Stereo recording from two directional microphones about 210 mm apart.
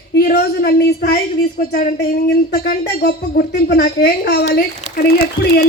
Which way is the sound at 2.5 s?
45° left (ahead or behind).